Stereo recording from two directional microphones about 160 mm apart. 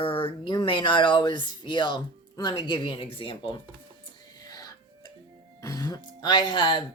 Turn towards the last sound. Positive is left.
turn(degrees=30)  # may be behind; listen again after turning